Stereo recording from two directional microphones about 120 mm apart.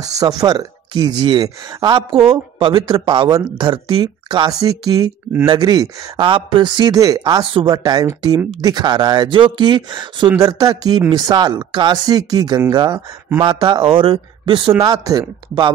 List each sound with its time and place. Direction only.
0.2 s speech: 30° right (ahead or behind)
10.4 s speech: 30° right (ahead or behind)
14.8 s speech: 35° right (ahead or behind)